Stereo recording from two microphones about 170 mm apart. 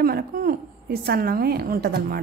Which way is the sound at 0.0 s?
60° right (ahead or behind).